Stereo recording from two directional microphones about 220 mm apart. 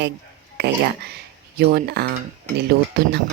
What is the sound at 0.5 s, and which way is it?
Speech, 45° right (ahead or behind).